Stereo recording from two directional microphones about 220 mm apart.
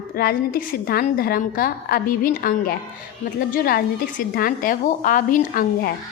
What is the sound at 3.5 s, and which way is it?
A woman's voice, 40° left (ahead or behind).